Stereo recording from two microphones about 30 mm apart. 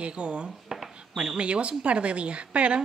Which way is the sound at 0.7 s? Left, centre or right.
Centre.